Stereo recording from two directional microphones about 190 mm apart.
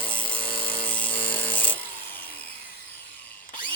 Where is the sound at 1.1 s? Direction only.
25° left (ahead or behind).